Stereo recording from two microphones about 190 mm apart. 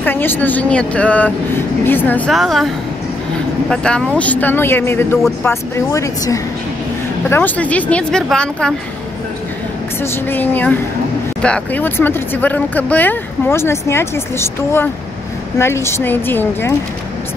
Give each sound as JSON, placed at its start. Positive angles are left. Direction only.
{"t": 0.0, "sound": "speech", "side_deg": 10}
{"t": 3.7, "sound": "speech", "side_deg": 5}
{"t": 10.3, "sound": "speech", "side_deg": 10}